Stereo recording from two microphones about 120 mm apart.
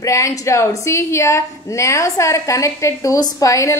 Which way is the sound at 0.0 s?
25° left (ahead or behind).